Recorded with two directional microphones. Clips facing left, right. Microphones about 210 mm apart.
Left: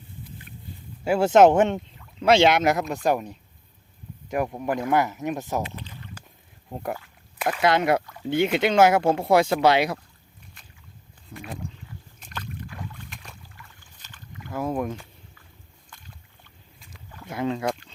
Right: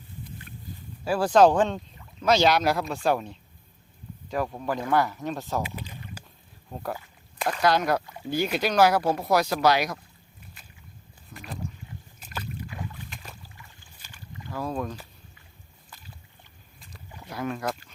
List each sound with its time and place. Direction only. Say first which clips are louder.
1.0 s speech: left 3 dB; 25° left (ahead or behind)
5.6 s rowboat: even; 10° right (ahead or behind)
6.7 s speech: left 3 dB; 20° left (ahead or behind)
7.3 s a sound: left 2 dB; 5° left (ahead or behind)
7.6 s speech: left 2 dB; 25° left (ahead or behind)
11.3 s speech: left 5 dB; 30° left (ahead or behind)
12.2 s boat: right 1 dB; 10° right (ahead or behind)
14.0 s rowboat: left 1 dB; 10° right (ahead or behind)
14.5 s speech: left 4 dB; 20° left (ahead or behind)
15.9 s boat: even; 5° right (ahead or behind)
17.2 s speech: left 4 dB; 20° left (ahead or behind)